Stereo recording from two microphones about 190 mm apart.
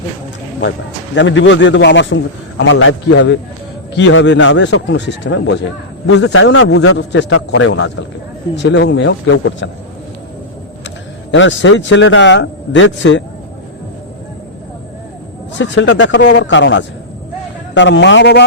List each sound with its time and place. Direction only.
1.1 s a man's voice: 75° left (ahead or behind)
11.3 s a man's voice: 80° left
15.5 s a man's voice: 70° left (ahead or behind)